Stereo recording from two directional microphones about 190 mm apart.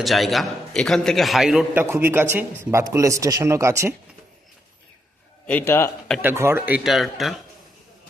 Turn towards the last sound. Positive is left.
turn(degrees=0)  # may be behind; listen again after turning